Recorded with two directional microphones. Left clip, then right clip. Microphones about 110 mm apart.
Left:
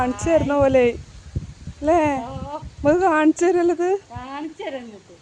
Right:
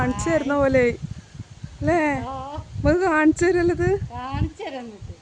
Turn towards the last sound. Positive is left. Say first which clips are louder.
# left 1 dB
turn(degrees=-25)  # may be behind; listen again after turning